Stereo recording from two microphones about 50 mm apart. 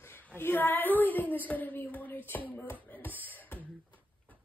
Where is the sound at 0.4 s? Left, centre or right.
Left.